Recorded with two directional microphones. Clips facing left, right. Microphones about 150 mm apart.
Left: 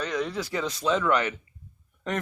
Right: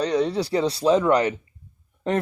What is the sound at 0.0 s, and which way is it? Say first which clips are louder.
Speech: right 7 dB; 35° right (ahead or behind).